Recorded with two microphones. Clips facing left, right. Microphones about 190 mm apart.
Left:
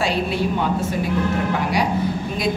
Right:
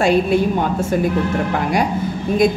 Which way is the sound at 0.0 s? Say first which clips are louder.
Right 6 dB; 50° right (ahead or behind).